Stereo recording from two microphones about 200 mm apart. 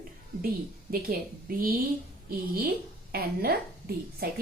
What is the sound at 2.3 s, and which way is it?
A woman's voice, 45° right (ahead or behind).